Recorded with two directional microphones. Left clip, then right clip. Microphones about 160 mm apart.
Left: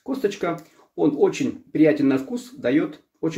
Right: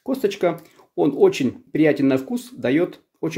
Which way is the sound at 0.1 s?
45° right (ahead or behind).